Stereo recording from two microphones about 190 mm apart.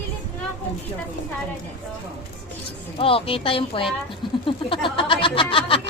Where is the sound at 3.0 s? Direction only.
30° left (ahead or behind).